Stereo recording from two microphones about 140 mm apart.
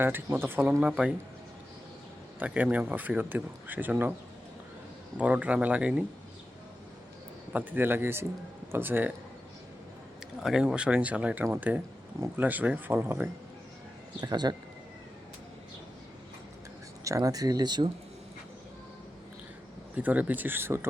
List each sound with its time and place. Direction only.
0.0 s speech: 15° right (ahead or behind)
2.4 s speech: 10° right (ahead or behind)
5.1 s speech: 10° right (ahead or behind)
7.5 s speech: 10° right (ahead or behind)
10.4 s speech: 5° right (ahead or behind)
14.2 s speech: 30° right (ahead or behind)
17.0 s speech: 25° right (ahead or behind)
20.0 s speech: 10° right (ahead or behind)